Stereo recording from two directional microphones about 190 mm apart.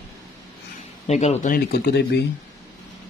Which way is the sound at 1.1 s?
35° left (ahead or behind).